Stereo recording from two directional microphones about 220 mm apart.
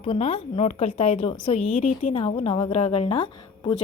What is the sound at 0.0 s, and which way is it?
A woman's voice, 25° left (ahead or behind).